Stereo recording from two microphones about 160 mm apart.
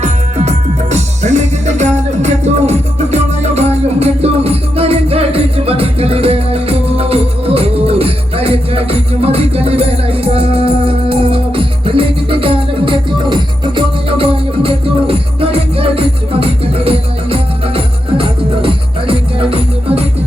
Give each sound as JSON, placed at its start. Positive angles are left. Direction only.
{"t": 0.0, "sound": "music", "side_deg": -45}